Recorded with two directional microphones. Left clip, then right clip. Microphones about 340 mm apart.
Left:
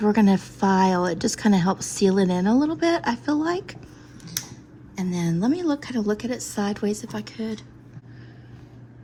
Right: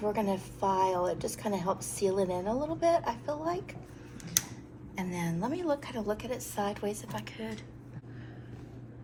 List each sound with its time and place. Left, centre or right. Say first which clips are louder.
0.1 s a woman's voice: left 10 dB; left
4.9 s a woman's voice: left 7 dB; centre